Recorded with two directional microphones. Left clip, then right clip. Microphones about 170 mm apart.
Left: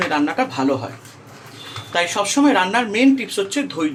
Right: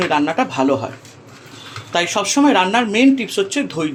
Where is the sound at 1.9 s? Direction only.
25° right (ahead or behind).